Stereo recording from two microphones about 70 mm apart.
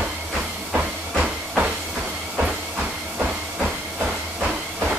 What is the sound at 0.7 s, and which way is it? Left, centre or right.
Steam, centre.